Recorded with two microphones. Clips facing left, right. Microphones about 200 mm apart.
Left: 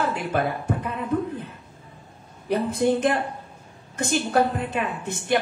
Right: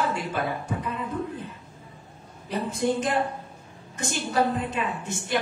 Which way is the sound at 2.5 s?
60° left (ahead or behind).